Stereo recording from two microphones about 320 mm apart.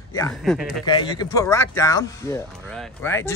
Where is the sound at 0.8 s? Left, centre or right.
Centre.